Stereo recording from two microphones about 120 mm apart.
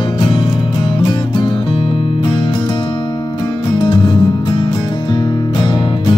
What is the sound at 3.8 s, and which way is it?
Music, 40° left (ahead or behind).